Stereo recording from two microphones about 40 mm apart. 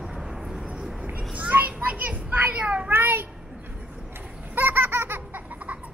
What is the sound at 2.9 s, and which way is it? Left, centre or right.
Child singing, right.